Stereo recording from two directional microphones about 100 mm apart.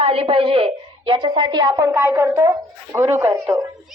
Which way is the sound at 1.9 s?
20° right (ahead or behind).